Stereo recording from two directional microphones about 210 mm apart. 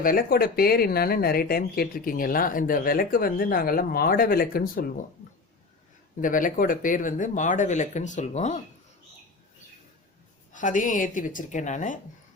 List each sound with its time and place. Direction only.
0.0 s speech: 40° left (ahead or behind)
6.2 s speech: 40° left (ahead or behind)
10.5 s speech: 35° left (ahead or behind)